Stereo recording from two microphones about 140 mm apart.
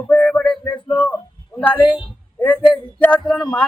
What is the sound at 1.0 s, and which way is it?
A man's voice, 10° left (ahead or behind).